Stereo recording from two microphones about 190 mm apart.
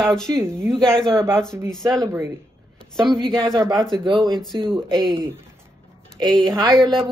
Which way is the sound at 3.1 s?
5° left (ahead or behind).